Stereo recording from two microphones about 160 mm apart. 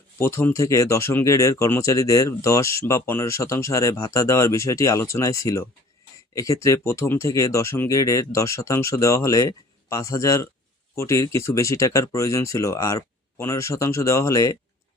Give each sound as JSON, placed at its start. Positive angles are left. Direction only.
{"t": 0.2, "sound": "speech", "side_deg": 15}